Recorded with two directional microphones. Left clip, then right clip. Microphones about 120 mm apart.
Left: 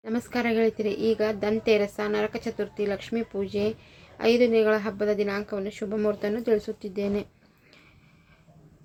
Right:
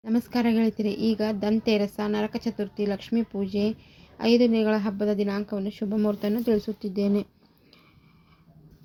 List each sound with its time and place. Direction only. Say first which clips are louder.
0.0 s a woman's voice: right 2 dB; 40° right (ahead or behind)